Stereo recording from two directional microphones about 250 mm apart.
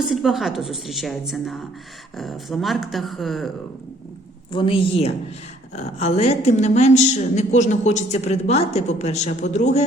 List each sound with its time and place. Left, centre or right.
0.1 s a woman's voice: centre
4.5 s a woman's voice: left